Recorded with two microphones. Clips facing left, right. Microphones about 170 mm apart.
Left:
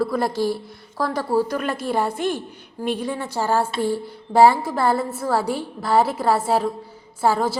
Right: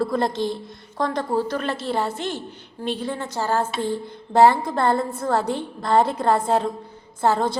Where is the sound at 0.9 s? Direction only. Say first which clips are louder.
Left 2 dB; 5° left (ahead or behind).